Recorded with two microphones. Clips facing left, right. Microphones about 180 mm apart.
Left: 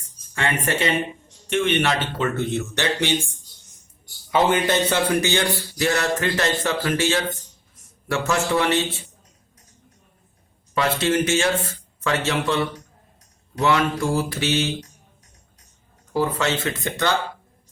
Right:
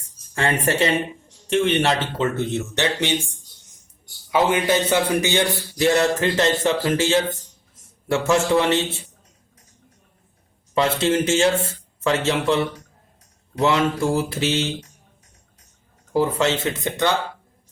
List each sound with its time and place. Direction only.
0.3 s a man's voice: 35° right (ahead or behind)
4.3 s a man's voice: 10° right (ahead or behind)
10.8 s a man's voice: 25° right (ahead or behind)
16.1 s a man's voice: 20° right (ahead or behind)